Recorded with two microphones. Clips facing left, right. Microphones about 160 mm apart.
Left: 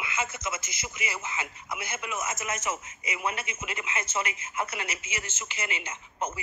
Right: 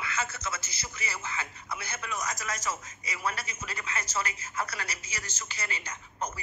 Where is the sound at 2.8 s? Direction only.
35° right (ahead or behind).